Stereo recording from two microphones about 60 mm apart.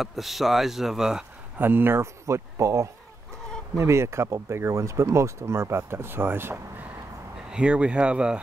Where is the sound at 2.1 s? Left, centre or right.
Right.